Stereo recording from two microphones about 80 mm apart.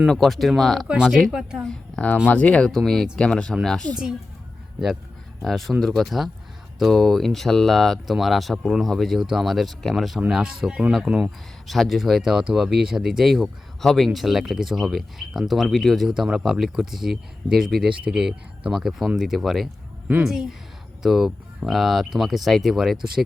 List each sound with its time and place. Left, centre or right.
0.1 s speech: centre
0.9 s speech: centre
2.2 s speech: centre
2.6 s speech: centre
5.4 s speech: centre